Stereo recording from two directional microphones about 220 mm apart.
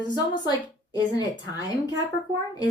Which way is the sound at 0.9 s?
15° left (ahead or behind).